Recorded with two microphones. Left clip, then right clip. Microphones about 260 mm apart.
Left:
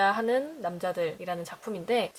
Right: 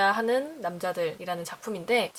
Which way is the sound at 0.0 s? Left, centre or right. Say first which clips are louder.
Right 1 dB; centre.